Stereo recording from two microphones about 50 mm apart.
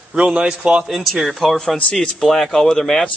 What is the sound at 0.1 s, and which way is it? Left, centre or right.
Speech, right.